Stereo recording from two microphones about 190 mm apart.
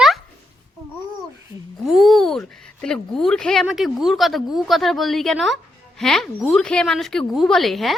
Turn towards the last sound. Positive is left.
turn(degrees=0)  # may be behind; listen again after turning